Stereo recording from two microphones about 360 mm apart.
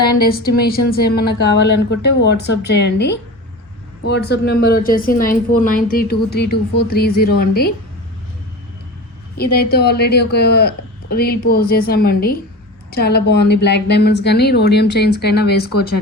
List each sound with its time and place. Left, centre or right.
0.0 s speech: left
9.4 s speech: left